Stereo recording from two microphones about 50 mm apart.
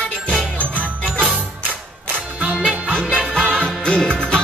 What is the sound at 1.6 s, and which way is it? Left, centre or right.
Music, right.